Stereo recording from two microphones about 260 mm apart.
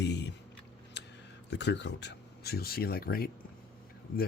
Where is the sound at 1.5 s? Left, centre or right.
Left.